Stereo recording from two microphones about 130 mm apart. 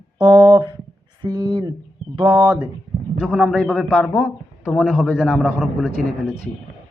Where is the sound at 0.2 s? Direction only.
30° right (ahead or behind).